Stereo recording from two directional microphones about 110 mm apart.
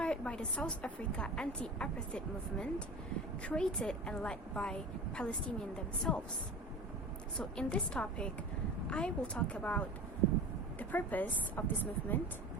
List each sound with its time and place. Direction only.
0.0 s a woman's voice: 10° left (ahead or behind)
7.3 s a woman's voice: 10° left (ahead or behind)